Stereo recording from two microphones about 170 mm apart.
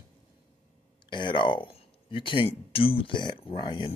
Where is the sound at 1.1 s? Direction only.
30° left (ahead or behind).